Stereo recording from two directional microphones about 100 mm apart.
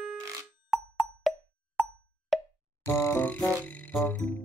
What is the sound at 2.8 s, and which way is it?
Music, 25° left (ahead or behind).